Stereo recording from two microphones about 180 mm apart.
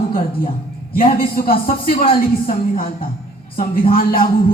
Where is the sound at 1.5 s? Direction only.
30° left (ahead or behind).